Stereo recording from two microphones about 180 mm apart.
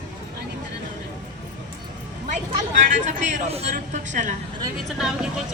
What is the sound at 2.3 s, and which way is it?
Speech, 45° right (ahead or behind).